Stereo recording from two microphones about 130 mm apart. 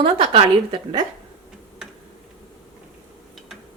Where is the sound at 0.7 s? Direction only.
40° right (ahead or behind).